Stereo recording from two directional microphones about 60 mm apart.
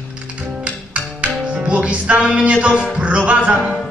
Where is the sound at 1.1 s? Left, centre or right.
Right.